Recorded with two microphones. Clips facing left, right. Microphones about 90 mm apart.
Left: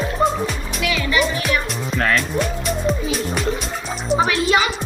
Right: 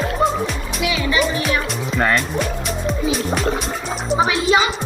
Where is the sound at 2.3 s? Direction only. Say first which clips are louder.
Left 1 dB; centre (ahead or behind).